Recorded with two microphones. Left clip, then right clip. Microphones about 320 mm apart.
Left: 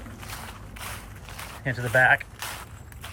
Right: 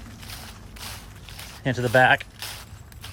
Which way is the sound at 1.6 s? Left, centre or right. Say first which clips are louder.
Right 4 dB; right.